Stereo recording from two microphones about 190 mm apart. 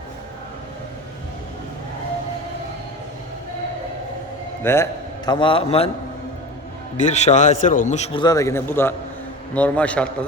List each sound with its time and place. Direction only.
4.6 s a man's voice: 15° left (ahead or behind); by 5.9 s 30° left (ahead or behind)
6.9 s a man's voice: 40° left (ahead or behind)
8.2 s a man's voice: 20° left (ahead or behind)